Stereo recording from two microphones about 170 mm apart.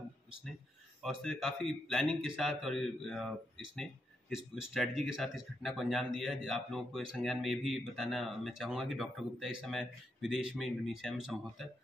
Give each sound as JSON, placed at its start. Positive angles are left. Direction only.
{"t": 1.0, "sound": "speech", "side_deg": 0}